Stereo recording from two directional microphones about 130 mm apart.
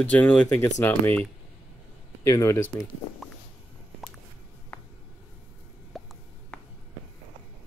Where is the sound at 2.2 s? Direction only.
20° left (ahead or behind).